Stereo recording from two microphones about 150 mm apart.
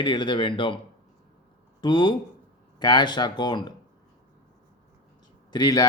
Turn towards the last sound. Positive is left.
turn(degrees=25)  # may be behind; listen again after turning